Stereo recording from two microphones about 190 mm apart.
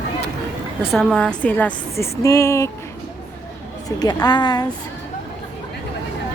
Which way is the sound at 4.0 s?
20° left (ahead or behind).